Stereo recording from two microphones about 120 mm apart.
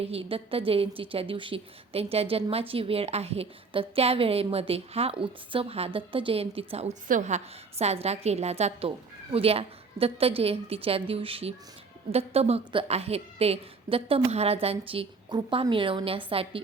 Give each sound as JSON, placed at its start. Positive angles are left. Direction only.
{"t": 0.0, "sound": "a woman's voice", "side_deg": -55}
{"t": 15.3, "sound": "a woman's voice", "side_deg": -35}
{"t": 15.7, "sound": "a woman's voice", "side_deg": -45}